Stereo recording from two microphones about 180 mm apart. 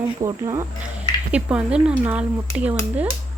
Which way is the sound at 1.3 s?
5° right (ahead or behind).